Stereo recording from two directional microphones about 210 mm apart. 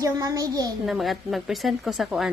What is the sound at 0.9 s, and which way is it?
Speech, centre (ahead or behind).